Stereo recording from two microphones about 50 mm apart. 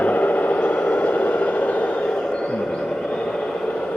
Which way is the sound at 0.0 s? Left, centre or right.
Left.